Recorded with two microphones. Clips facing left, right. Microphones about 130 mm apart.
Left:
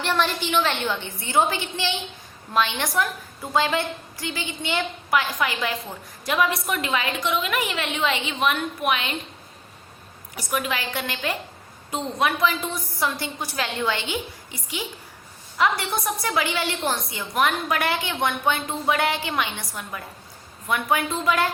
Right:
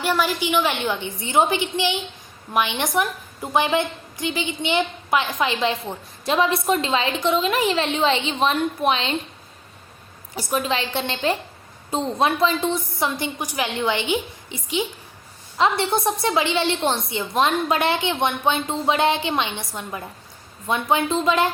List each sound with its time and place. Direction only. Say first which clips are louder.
0.0 s a woman's voice: right 2 dB; 10° right (ahead or behind); by 9.1 s 30° right (ahead or behind)
10.5 s a woman's voice: right 3 dB; 30° right (ahead or behind)